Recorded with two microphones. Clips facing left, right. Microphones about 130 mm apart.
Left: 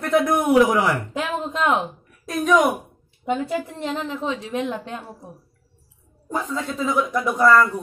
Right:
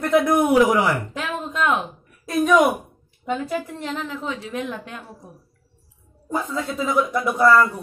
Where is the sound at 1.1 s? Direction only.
25° left (ahead or behind).